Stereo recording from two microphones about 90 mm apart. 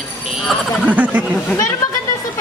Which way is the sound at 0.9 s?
15° right (ahead or behind).